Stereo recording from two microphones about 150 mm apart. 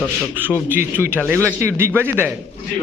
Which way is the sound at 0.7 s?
15° right (ahead or behind).